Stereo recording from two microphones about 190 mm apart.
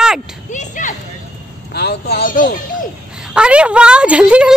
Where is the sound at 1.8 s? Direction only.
60° left (ahead or behind).